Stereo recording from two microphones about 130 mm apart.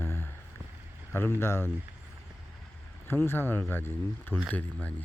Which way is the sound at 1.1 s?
20° left (ahead or behind).